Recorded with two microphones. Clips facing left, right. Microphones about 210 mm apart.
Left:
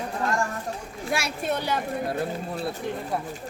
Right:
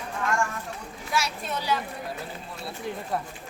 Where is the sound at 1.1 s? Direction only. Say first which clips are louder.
Left 3 dB; 55° left (ahead or behind).